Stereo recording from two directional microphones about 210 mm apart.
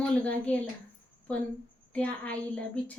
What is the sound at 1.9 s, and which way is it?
Speech, 5° left (ahead or behind).